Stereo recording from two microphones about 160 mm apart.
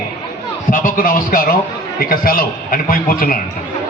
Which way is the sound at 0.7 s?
55° left (ahead or behind).